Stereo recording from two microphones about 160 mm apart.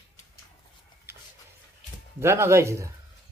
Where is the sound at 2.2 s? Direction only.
15° right (ahead or behind).